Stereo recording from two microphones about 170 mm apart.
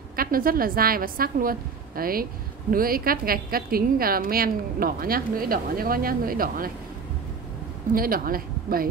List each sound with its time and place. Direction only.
0.1 s a woman's voice: 60° right (ahead or behind)
7.9 s a woman's voice: 60° right (ahead or behind)